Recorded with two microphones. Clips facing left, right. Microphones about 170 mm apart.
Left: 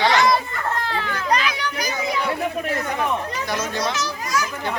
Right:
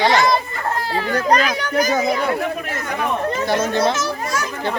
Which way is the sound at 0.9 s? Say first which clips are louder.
Right 8 dB; 40° right (ahead or behind).